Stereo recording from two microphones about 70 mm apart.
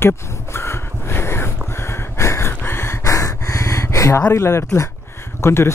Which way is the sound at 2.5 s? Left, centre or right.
Left.